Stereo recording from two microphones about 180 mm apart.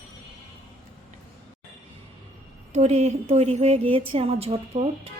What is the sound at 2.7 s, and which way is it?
A woman's voice, 35° right (ahead or behind).